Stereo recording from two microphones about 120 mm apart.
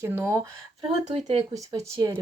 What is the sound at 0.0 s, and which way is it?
Speech, 20° right (ahead or behind).